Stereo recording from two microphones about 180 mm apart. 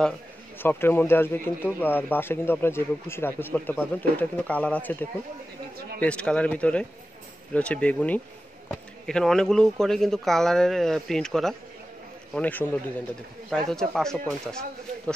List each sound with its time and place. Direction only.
0.6 s speech: 10° left (ahead or behind)
5.9 s speech: 5° left (ahead or behind)